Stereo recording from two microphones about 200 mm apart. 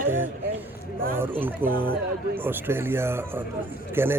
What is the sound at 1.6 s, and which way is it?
Speech, 45° right (ahead or behind).